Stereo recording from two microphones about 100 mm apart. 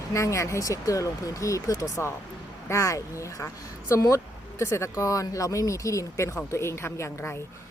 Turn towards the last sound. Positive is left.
turn(degrees=25)  # may be behind; listen again after turning